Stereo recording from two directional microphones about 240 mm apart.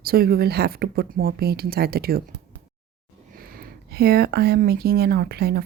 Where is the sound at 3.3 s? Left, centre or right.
Right.